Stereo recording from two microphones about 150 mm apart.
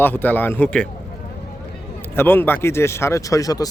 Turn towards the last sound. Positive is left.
turn(degrees=25)  # may be behind; listen again after turning